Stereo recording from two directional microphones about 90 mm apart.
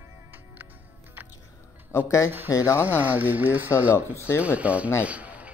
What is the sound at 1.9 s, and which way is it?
Speech, 30° left (ahead or behind).